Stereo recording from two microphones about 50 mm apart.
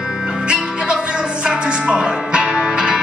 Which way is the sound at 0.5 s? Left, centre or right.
Centre.